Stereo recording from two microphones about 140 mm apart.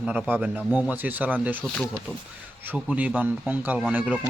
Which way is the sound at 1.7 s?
Centre (ahead or behind).